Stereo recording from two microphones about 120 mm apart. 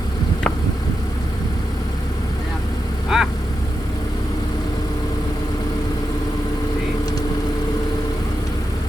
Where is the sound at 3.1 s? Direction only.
Centre (ahead or behind).